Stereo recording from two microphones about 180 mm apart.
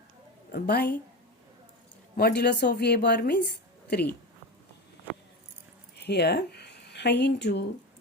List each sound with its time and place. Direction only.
0.5 s speech: 60° left (ahead or behind)
2.1 s speech: 65° left (ahead or behind)
6.0 s speech: 65° left (ahead or behind)